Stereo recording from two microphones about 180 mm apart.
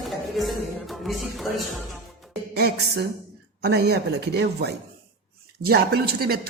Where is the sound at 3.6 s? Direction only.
65° right (ahead or behind).